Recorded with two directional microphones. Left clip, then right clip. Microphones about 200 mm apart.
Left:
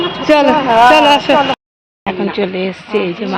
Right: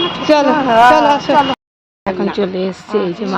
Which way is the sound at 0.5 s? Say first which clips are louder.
Left 1 dB; 55° right (ahead or behind).